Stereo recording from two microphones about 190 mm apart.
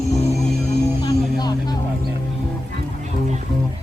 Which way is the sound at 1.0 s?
20° left (ahead or behind).